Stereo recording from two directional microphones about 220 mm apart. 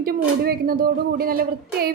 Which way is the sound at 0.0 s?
45° right (ahead or behind).